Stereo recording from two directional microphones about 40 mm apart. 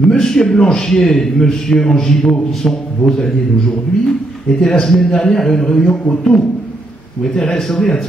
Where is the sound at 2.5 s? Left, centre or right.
Centre.